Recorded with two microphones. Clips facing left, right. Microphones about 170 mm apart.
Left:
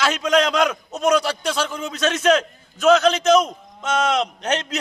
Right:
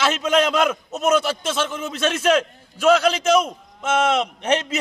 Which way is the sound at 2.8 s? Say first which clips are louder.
Left 1 dB; 10° right (ahead or behind).